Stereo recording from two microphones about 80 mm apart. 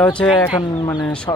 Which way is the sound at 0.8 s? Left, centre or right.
Left.